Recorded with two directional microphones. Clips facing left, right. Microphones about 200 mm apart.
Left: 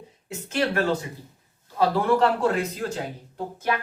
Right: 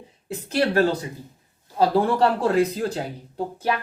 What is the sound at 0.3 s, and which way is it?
Speech, 35° right (ahead or behind).